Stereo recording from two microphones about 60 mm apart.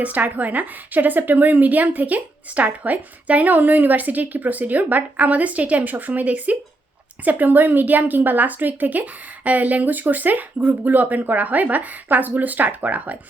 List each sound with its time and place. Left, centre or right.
0.0 s a woman's voice: right